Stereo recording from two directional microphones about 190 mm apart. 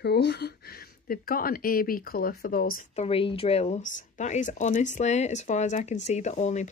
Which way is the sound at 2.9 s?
30° left (ahead or behind).